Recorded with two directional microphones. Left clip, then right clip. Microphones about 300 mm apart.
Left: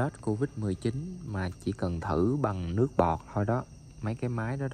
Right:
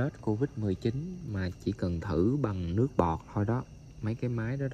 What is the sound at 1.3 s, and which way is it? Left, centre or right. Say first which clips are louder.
Speech: left 1 dB; centre.